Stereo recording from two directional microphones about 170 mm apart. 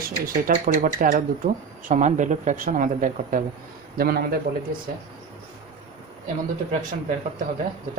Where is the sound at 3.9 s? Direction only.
65° right (ahead or behind).